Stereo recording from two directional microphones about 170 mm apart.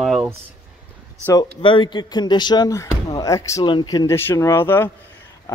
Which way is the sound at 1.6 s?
30° left (ahead or behind).